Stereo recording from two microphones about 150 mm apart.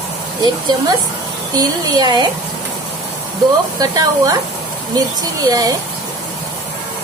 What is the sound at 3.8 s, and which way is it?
Speech, 25° right (ahead or behind).